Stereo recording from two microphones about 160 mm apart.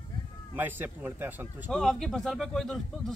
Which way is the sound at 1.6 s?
5° left (ahead or behind).